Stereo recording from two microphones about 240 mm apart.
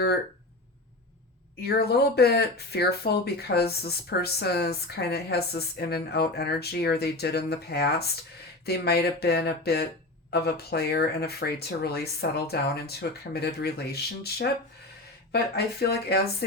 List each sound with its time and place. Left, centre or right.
1.6 s speech: left